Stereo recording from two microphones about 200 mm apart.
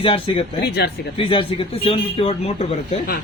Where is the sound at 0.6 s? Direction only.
55° left (ahead or behind).